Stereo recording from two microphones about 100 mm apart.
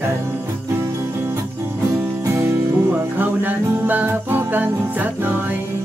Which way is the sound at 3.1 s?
20° right (ahead or behind).